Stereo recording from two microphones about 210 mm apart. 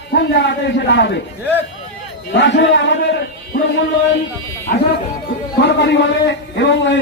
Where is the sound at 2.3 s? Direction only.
60° left (ahead or behind).